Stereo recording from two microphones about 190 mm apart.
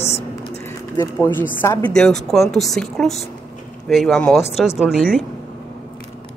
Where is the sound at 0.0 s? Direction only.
35° left (ahead or behind).